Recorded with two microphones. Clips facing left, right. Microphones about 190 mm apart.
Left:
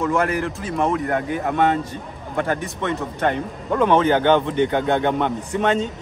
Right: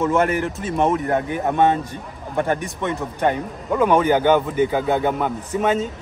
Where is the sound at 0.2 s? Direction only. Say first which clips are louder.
Right 2 dB; 25° right (ahead or behind).